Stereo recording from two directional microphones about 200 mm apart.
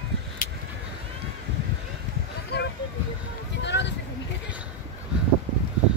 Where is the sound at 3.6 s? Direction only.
60° left (ahead or behind).